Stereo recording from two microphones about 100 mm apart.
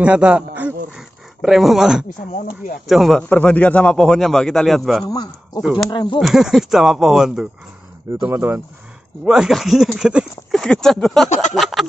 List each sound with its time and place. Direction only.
0.0 s a sound: 10° right (ahead or behind)
2.9 s speech: centre (ahead or behind)
3.3 s speech: 15° left (ahead or behind)
5.0 s speech: 40° left (ahead or behind)
5.6 s speech: 5° right (ahead or behind)
5.9 s speech: 55° left (ahead or behind)
6.1 s speech: centre (ahead or behind)
8.3 s speech: 20° right (ahead or behind)
9.2 s speech: 5° right (ahead or behind)